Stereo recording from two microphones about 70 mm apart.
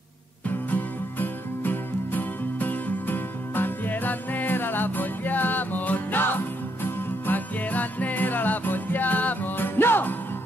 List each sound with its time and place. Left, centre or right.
1.2 s music: left